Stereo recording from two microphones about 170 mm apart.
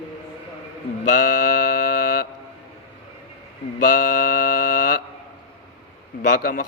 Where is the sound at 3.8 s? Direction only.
55° left (ahead or behind).